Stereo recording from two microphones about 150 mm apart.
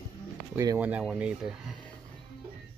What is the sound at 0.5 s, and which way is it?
Speech, 20° right (ahead or behind).